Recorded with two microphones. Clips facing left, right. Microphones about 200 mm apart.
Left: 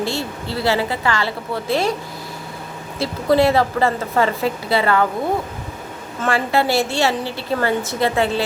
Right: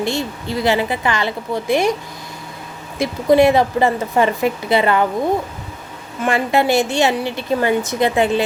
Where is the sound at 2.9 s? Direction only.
15° right (ahead or behind).